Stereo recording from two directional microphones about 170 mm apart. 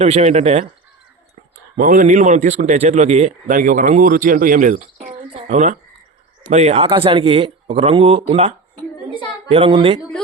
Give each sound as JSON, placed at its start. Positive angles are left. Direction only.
{"t": 0.0, "sound": "speech", "side_deg": -40}
{"t": 1.7, "sound": "a man's voice", "side_deg": -55}